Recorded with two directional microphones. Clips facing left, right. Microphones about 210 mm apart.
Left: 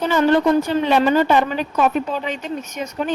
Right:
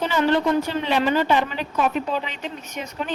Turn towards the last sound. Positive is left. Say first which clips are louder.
# left 5 dB
turn(degrees=45)  # may be behind; listen again after turning